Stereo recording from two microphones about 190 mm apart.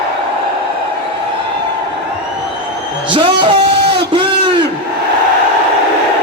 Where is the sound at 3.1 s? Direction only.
25° right (ahead or behind).